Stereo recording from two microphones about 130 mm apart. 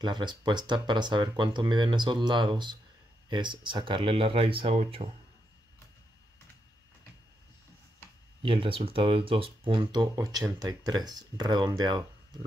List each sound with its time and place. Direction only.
0.0 s speech: 35° right (ahead or behind)
8.4 s speech: 40° right (ahead or behind)